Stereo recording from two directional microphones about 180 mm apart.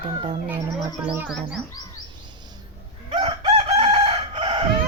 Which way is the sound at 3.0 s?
30° right (ahead or behind).